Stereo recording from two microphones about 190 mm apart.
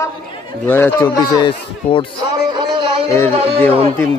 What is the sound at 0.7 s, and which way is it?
Speech, 10° left (ahead or behind).